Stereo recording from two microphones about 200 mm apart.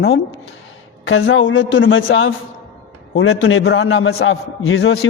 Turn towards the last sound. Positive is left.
turn(degrees=80)